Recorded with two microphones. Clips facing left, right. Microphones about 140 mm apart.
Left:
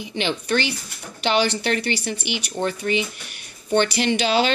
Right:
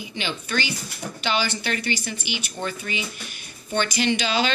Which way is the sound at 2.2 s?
60° left (ahead or behind).